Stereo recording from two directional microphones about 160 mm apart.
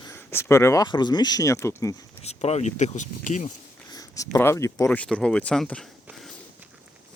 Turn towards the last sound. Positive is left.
turn(degrees=5)  # may be behind; listen again after turning